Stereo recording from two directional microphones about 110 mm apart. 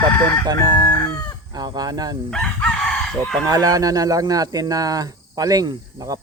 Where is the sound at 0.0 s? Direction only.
25° left (ahead or behind).